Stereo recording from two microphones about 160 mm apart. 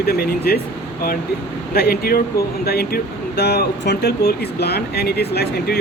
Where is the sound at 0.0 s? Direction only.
70° left (ahead or behind).